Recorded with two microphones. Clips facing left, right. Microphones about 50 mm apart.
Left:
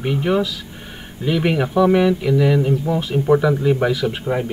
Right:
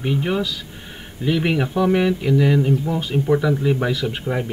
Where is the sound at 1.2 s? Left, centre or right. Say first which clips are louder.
Left 1 dB; centre.